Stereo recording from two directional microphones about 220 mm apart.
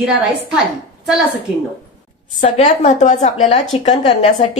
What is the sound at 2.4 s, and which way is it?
A woman's voice, 35° left (ahead or behind).